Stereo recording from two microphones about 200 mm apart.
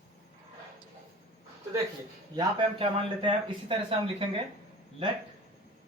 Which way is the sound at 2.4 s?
25° right (ahead or behind).